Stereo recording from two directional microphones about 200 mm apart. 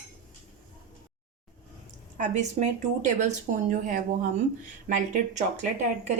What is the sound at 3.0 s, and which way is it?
Speech, 35° right (ahead or behind).